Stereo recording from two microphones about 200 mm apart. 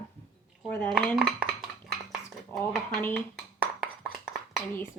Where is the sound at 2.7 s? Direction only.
10° left (ahead or behind).